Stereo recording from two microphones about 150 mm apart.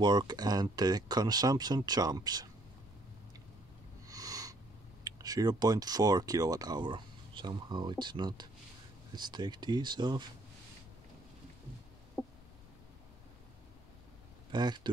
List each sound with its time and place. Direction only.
0.0 s speech: 30° right (ahead or behind)
4.1 s a sound: 25° right (ahead or behind)
5.0 s speech: 25° right (ahead or behind)
14.5 s speech: 30° right (ahead or behind)